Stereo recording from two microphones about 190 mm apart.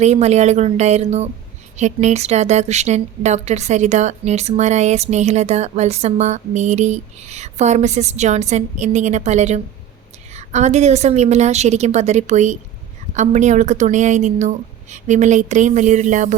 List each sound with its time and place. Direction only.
0.0 s a woman's voice: 35° right (ahead or behind)